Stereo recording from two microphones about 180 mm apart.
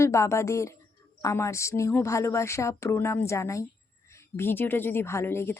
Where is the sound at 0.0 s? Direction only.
15° left (ahead or behind).